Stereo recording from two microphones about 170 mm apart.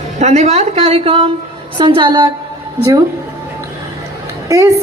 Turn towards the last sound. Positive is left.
turn(degrees=-20)  # may be behind; listen again after turning